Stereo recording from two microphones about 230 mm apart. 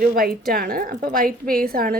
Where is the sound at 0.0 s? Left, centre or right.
Right.